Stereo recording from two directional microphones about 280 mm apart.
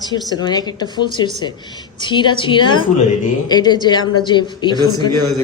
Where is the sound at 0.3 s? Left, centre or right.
Centre.